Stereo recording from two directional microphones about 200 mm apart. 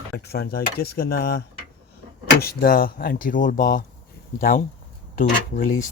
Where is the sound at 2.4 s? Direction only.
45° left (ahead or behind).